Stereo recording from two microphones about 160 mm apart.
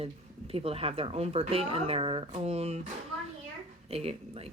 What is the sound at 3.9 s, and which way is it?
Speech, 40° right (ahead or behind).